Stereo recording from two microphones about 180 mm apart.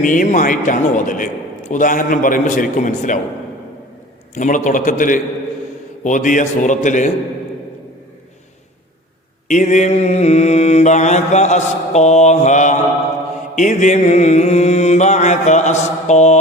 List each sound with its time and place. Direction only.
0.0 s a man's voice: 45° left (ahead or behind)
4.4 s a man's voice: 45° left (ahead or behind)
9.5 s mantra: 40° left (ahead or behind)